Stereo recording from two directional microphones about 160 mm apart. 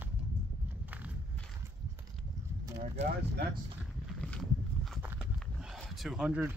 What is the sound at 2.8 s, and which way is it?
Speech, 55° right (ahead or behind).